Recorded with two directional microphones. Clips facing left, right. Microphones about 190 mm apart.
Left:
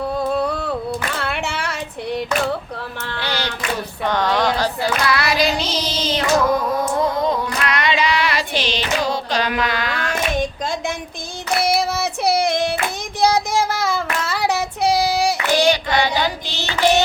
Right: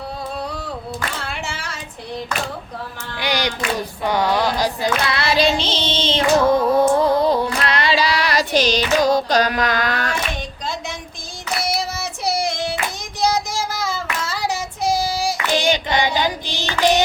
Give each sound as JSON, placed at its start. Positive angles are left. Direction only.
{"t": 0.4, "sound": "a sound", "side_deg": 55}
{"t": 1.2, "sound": "child singing", "side_deg": 65}
{"t": 3.2, "sound": "speech", "side_deg": -15}
{"t": 5.0, "sound": "child singing", "side_deg": -25}
{"t": 10.3, "sound": "a sound", "side_deg": 50}
{"t": 11.6, "sound": "child singing", "side_deg": 60}
{"t": 15.5, "sound": "child singing", "side_deg": -20}